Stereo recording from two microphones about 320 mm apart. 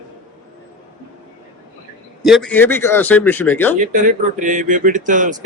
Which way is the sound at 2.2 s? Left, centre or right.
Centre.